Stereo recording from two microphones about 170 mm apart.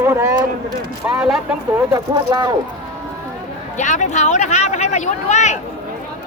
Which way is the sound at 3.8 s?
45° left (ahead or behind).